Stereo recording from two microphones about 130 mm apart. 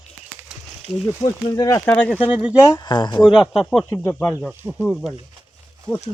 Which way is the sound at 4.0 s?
15° left (ahead or behind).